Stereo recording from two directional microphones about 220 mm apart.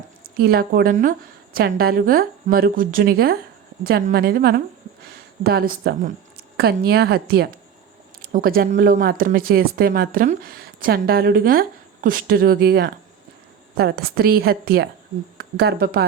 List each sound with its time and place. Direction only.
0.3 s a woman's voice: 45° right (ahead or behind)